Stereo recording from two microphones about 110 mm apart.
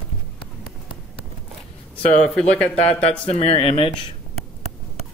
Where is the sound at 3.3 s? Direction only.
65° left (ahead or behind).